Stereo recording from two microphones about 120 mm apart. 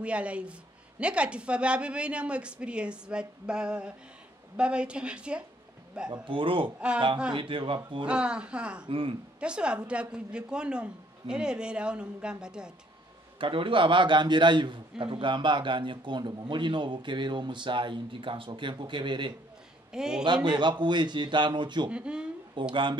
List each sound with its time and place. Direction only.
0.0 s a woman's voice: 10° right (ahead or behind)
6.0 s speech: 40° right (ahead or behind)
8.1 s a woman's voice: 10° right (ahead or behind)
8.8 s speech: 50° right (ahead or behind)
9.4 s a woman's voice: 10° right (ahead or behind)
13.4 s a man's voice: 45° right (ahead or behind)
19.9 s a man's voice: 5° right (ahead or behind)
20.4 s a man's voice: 40° right (ahead or behind)
21.9 s speech: 10° right (ahead or behind)
22.6 s speech: 40° right (ahead or behind)